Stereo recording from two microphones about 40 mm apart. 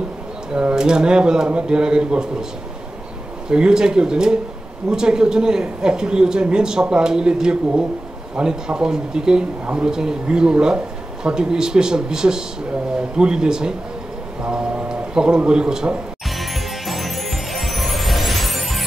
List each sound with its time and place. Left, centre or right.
0.5 s a woman's voice: right
3.4 s a woman's voice: centre
16.3 s music: centre